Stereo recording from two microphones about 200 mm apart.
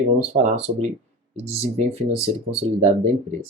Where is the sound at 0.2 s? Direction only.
35° right (ahead or behind).